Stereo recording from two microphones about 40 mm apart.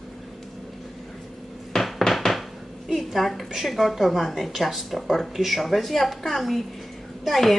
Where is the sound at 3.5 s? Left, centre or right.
Centre.